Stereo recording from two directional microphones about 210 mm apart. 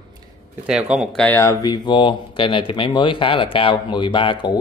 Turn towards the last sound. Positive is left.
turn(degrees=20)  # may be behind; listen again after turning